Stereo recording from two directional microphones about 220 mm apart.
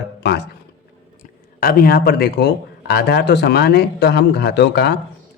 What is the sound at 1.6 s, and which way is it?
Speech, 45° left (ahead or behind).